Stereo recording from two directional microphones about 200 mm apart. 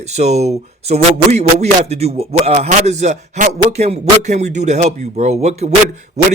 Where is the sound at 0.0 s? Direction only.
35° right (ahead or behind).